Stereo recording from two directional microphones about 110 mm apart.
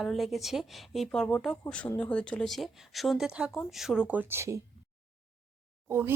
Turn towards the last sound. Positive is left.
turn(degrees=-20)  # may be behind; listen again after turning